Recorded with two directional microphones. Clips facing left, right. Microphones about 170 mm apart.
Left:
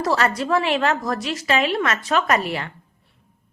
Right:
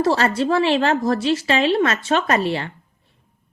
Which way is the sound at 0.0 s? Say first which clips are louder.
Right 3 dB; 30° right (ahead or behind).